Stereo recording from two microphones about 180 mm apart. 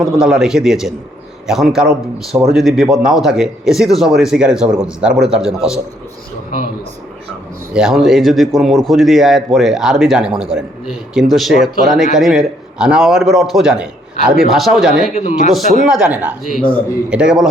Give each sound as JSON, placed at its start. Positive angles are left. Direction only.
{"t": 0.0, "sound": "a man's voice", "side_deg": -5}
{"t": 7.7, "sound": "a man's voice", "side_deg": -5}
{"t": 15.1, "sound": "speech", "side_deg": 40}
{"t": 15.9, "sound": "a man's voice", "side_deg": -5}